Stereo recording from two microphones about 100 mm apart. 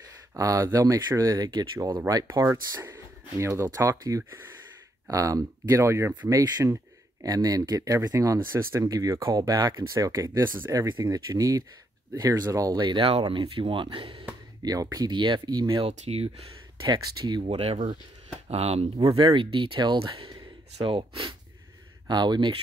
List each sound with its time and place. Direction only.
0.4 s speech: 35° right (ahead or behind)
2.4 s speech: 25° right (ahead or behind)
10.9 s speech: 45° right (ahead or behind); by 14.2 s 65° right (ahead or behind)
14.6 s speech: 40° right (ahead or behind)
15.8 s speech: 85° right
16.8 s speech: 50° right (ahead or behind)
17.5 s speech: 85° right
19.1 s speech: 55° right (ahead or behind)
20.7 s speech: 65° right (ahead or behind)
22.0 s speech: 45° right (ahead or behind)